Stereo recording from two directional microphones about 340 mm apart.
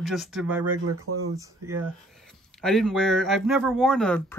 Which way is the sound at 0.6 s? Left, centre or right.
Right.